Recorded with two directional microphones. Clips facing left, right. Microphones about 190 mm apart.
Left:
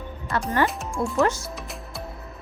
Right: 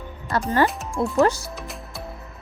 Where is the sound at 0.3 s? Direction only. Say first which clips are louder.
Right 3 dB; 35° right (ahead or behind).